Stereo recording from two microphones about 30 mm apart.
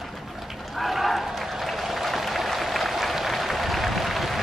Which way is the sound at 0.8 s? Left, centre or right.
Centre.